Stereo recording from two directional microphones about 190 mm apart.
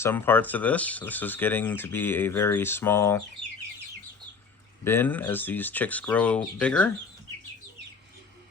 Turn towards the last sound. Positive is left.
turn(degrees=5)  # may be behind; listen again after turning